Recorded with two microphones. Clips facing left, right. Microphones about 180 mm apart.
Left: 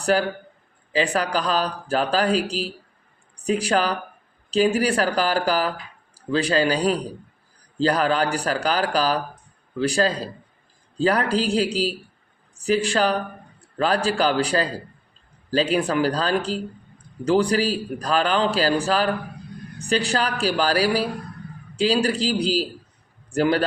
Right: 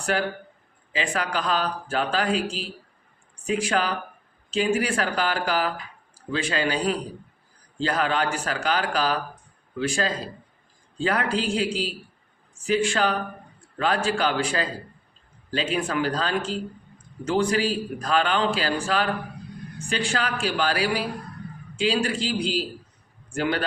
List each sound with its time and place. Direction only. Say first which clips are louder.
0.0 s a man's voice: left 5 dB; 35° left (ahead or behind)